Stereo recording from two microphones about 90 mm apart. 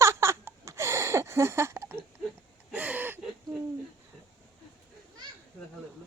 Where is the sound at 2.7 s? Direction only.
15° right (ahead or behind).